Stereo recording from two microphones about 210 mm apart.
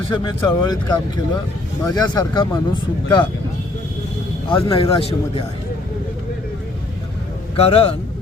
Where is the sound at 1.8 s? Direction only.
20° left (ahead or behind).